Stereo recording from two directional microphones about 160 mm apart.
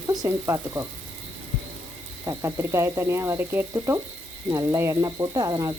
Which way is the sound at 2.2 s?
20° right (ahead or behind).